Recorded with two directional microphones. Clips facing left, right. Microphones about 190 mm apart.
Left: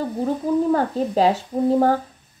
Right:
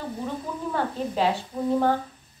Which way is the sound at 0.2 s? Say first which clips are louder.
Left 14 dB; 40° left (ahead or behind).